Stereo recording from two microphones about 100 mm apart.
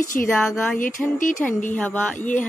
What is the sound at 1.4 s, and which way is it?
Speech, 15° left (ahead or behind).